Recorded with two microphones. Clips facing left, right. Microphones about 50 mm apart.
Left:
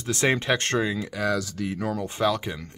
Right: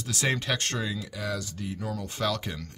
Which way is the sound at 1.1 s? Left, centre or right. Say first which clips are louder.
Left 7 dB; left.